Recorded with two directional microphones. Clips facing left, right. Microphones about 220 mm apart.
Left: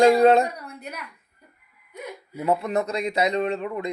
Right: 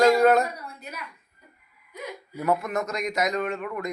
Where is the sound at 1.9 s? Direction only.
25° left (ahead or behind).